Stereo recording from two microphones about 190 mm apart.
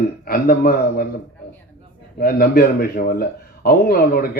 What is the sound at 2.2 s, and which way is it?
Speech, 50° left (ahead or behind).